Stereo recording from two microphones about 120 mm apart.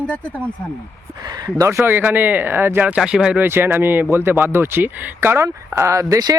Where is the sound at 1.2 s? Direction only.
35° right (ahead or behind).